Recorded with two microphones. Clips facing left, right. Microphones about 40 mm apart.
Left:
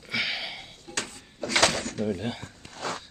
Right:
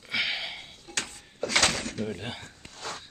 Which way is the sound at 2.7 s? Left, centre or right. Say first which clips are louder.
Left 5 dB; left.